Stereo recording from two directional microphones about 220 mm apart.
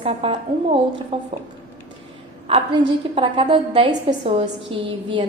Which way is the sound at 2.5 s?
25° right (ahead or behind).